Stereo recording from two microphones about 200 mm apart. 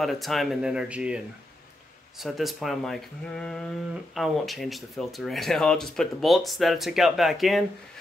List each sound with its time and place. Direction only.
0.0 s speech: centre (ahead or behind)